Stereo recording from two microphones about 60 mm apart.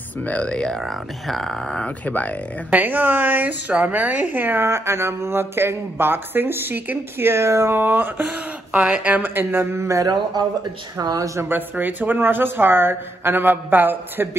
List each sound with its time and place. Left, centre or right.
0.2 s speech: left
0.7 s speech: centre
2.0 s speech: left
2.7 s a woman's voice: right
4.6 s speech: right
11.4 s speech: right